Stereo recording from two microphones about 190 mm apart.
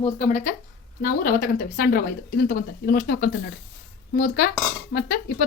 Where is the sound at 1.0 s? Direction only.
45° left (ahead or behind).